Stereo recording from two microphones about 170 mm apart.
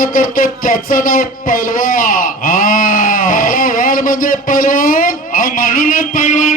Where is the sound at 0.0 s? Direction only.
55° left (ahead or behind).